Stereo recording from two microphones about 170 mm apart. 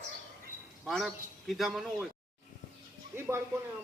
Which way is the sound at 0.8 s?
Centre (ahead or behind).